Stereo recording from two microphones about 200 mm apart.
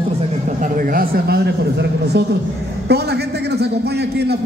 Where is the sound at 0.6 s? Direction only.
45° right (ahead or behind).